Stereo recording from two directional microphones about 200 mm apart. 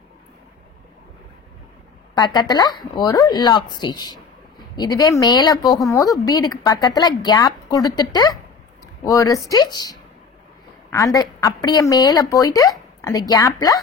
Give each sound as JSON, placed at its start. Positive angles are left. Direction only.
{"t": 2.1, "sound": "a woman's voice", "side_deg": 20}